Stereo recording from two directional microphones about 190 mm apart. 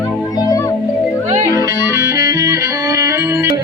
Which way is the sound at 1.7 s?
15° right (ahead or behind).